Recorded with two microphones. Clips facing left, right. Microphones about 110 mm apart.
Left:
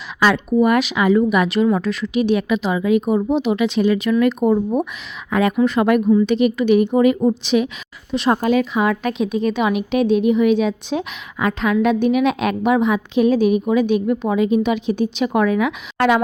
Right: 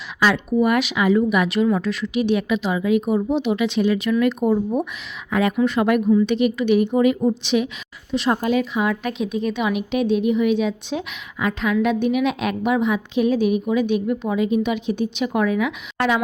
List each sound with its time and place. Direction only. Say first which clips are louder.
0.2 s speech: left 3 dB; 55° left (ahead or behind)
5.3 s a woman's voice: left 2 dB; 50° left (ahead or behind); by 9.6 s 90° left
9.6 s a woman's voice: left 2 dB; 65° left (ahead or behind)
12.6 s a woman's voice: left 3 dB; 90° left; by 16.2 s 65° left (ahead or behind)